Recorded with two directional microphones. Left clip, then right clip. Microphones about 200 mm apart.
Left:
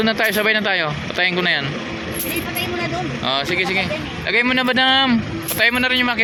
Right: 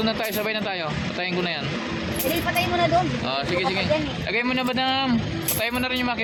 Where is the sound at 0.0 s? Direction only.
30° left (ahead or behind).